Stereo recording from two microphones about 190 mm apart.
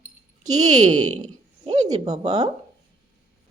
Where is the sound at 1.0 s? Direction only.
35° right (ahead or behind).